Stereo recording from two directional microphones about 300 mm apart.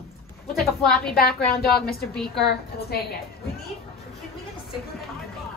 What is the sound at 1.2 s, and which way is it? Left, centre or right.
Speech, left.